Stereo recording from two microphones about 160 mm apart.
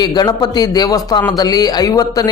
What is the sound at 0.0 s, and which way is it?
A man's voice, 25° left (ahead or behind).